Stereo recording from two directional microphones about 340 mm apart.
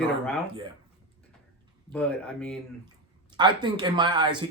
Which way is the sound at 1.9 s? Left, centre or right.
Centre.